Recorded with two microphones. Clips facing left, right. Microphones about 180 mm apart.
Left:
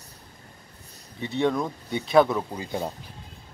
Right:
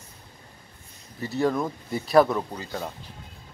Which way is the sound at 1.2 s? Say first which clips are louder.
Even; centre (ahead or behind).